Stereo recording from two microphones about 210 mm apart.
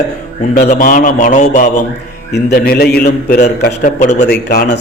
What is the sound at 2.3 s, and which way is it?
Speech, 50° left (ahead or behind).